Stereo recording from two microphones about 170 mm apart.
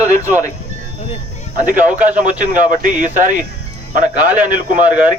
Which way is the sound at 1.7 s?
10° right (ahead or behind).